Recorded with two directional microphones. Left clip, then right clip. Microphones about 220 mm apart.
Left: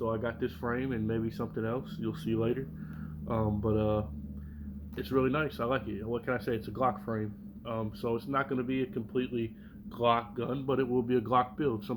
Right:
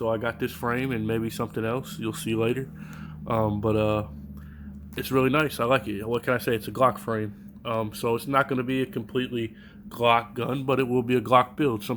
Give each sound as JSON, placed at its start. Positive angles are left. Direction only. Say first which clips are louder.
{"t": 0.0, "sound": "speech", "louder": "right 6 dB", "side_deg": -50}